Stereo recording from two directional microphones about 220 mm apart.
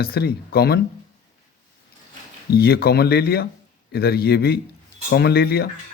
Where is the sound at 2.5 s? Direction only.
45° left (ahead or behind).